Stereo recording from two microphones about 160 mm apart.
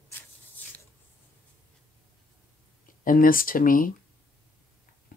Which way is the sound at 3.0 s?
60° left (ahead or behind).